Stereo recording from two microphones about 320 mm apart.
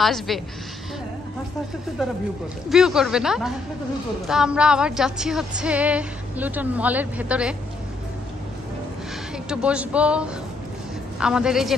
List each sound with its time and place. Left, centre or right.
0.0 s speech: centre
2.7 s speech: centre
9.5 s speech: centre